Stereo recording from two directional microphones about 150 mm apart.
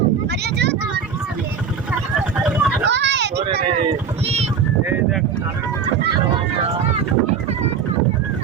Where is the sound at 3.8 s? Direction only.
40° right (ahead or behind).